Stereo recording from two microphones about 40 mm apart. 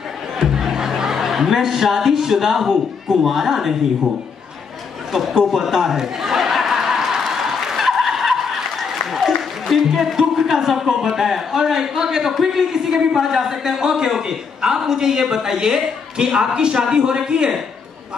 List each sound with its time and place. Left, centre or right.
0.4 s chuckle: centre
2.7 s a man's voice: centre
5.1 s a man's voice: centre
5.5 s a sound: centre
9.8 s a man's voice: centre